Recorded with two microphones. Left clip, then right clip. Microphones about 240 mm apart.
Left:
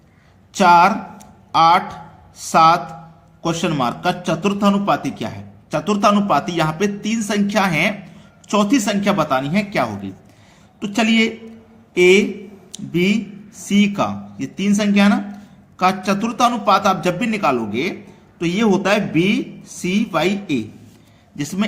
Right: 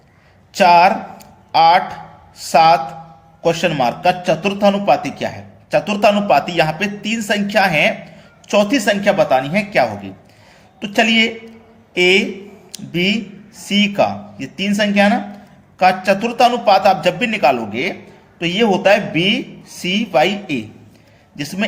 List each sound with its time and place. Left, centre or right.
0.5 s a man's voice: centre